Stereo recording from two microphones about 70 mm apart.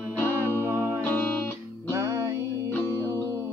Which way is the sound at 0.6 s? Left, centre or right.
Right.